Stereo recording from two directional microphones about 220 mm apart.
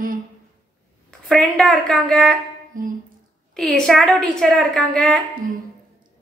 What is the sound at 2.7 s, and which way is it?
Speech, 40° right (ahead or behind).